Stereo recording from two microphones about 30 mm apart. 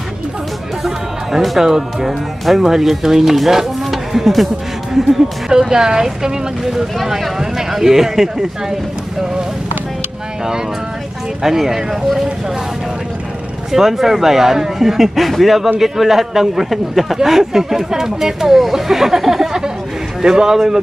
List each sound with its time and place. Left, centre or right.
0.8 s speech: centre
1.6 s a woman's voice: centre
5.5 s a woman's voice: right
11.4 s a woman's voice: centre
13.7 s a woman's voice: centre